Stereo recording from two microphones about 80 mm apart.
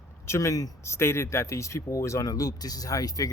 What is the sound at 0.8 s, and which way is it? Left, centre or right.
Speech, left.